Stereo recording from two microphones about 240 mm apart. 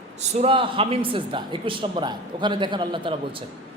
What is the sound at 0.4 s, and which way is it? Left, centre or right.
A woman's voice, right.